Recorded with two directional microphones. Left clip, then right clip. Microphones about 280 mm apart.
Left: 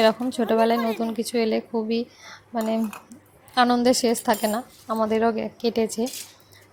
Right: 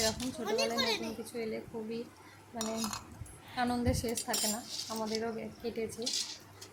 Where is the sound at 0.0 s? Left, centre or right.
Left.